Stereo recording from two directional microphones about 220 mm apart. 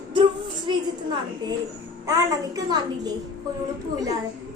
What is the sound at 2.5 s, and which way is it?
Speech, 15° right (ahead or behind).